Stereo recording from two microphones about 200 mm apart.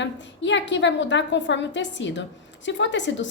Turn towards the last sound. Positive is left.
turn(degrees=65)  # may be behind; listen again after turning